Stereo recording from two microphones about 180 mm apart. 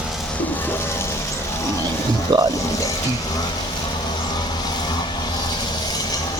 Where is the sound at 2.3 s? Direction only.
25° right (ahead or behind).